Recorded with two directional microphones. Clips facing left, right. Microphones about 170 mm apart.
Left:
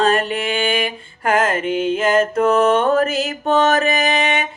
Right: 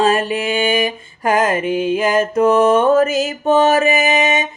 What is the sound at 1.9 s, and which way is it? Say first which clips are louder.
Music: left 1 dB; 10° right (ahead or behind).